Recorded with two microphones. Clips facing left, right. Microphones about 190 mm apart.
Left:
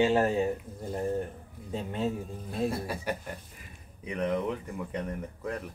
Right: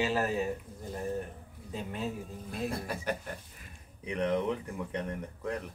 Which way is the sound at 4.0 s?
Centre (ahead or behind).